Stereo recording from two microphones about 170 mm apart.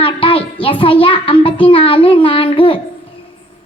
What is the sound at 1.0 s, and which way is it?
Speech, 30° left (ahead or behind).